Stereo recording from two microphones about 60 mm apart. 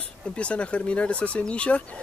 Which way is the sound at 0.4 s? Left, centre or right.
Centre.